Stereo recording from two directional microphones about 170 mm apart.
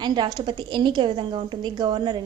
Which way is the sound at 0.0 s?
25° right (ahead or behind).